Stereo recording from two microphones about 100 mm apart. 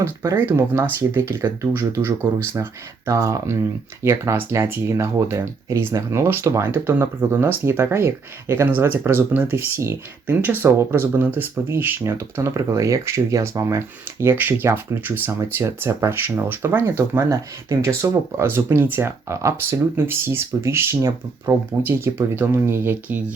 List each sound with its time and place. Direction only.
0.0 s speech: 30° right (ahead or behind)